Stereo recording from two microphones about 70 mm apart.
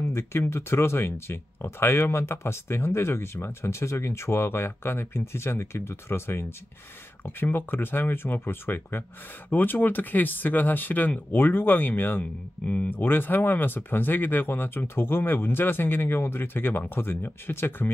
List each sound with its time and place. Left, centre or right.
0.1 s speech: left